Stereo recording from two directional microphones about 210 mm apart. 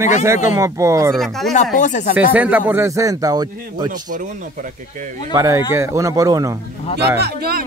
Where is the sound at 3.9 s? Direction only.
40° right (ahead or behind).